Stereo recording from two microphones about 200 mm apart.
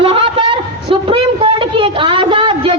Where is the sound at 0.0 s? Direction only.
25° right (ahead or behind).